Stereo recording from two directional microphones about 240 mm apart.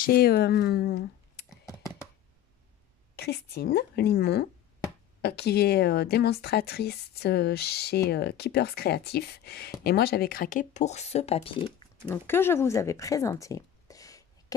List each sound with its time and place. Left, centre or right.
0.0 s speech: left
1.7 s computer keyboard: centre
3.2 s a woman's voice: left
12.1 s speech: centre